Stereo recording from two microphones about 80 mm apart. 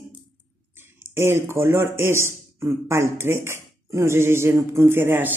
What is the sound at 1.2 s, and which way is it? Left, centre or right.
A man's voice, right.